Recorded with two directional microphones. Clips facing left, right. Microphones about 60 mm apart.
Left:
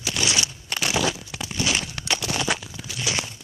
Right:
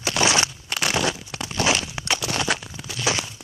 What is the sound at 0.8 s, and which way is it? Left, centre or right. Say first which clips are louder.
Crumpling: right 1 dB; right.